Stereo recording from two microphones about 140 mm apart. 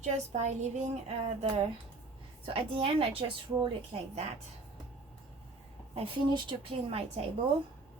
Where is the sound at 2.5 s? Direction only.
40° right (ahead or behind).